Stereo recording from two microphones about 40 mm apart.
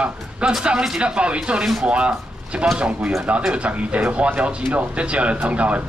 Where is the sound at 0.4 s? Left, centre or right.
Right.